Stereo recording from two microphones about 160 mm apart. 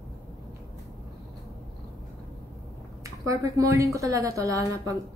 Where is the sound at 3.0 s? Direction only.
20° right (ahead or behind).